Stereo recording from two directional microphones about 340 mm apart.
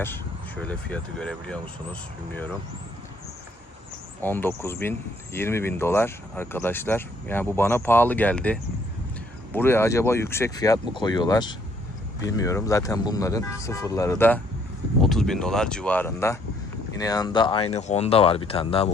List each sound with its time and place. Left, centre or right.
0.6 s speech: centre
4.2 s speech: centre